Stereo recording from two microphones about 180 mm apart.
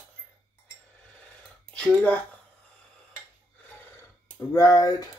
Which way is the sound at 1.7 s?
5° left (ahead or behind).